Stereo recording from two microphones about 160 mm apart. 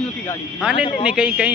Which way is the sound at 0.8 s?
30° left (ahead or behind).